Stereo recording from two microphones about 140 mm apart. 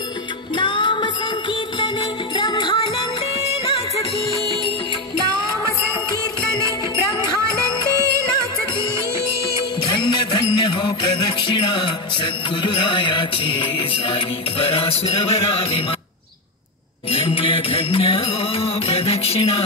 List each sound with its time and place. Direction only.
0.6 s music: 35° left (ahead or behind)
9.6 s music: 35° left (ahead or behind)
17.1 s music: 40° left (ahead or behind)